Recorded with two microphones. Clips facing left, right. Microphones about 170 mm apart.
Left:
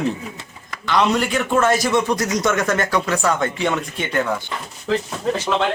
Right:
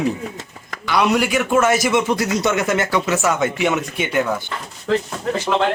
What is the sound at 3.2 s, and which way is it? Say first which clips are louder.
A man's voice: right 1 dB; 5° right (ahead or behind).